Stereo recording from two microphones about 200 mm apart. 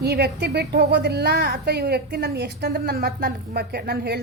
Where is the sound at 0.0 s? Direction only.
55° right (ahead or behind).